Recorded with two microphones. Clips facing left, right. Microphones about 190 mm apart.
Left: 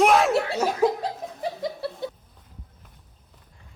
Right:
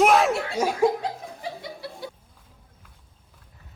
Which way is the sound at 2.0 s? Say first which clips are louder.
Left 4 dB; 25° left (ahead or behind).